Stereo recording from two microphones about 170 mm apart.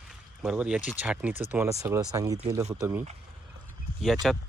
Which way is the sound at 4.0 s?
Centre (ahead or behind).